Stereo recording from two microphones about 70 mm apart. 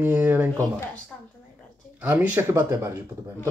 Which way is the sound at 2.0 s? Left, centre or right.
Right.